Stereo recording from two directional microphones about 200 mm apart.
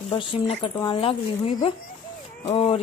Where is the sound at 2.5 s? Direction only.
25° left (ahead or behind).